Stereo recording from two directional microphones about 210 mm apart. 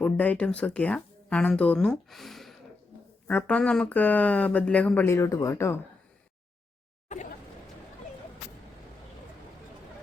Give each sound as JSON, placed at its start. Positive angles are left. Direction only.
{"t": 0.0, "sound": "speech", "side_deg": 5}
{"t": 7.1, "sound": "music", "side_deg": 35}